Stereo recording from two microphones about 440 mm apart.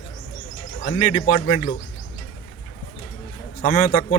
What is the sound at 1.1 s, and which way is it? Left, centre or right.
Speech, centre.